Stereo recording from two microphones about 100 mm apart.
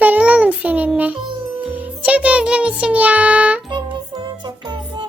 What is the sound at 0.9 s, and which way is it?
Music, 15° right (ahead or behind).